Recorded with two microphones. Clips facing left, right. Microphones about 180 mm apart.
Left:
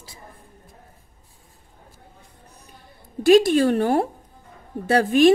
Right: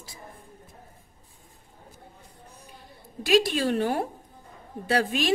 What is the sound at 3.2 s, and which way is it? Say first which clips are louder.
A woman's voice: left 8 dB; 50° left (ahead or behind).